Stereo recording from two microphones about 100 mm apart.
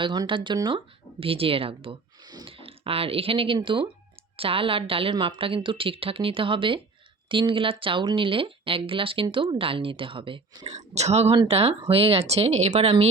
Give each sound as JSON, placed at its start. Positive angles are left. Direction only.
{"t": 0.0, "sound": "speech", "side_deg": -50}
{"t": 1.2, "sound": "a woman's voice", "side_deg": -65}
{"t": 2.2, "sound": "a sound", "side_deg": -45}
{"t": 2.5, "sound": "a woman's voice", "side_deg": -65}
{"t": 5.1, "sound": "speech", "side_deg": -55}
{"t": 10.9, "sound": "speech", "side_deg": -90}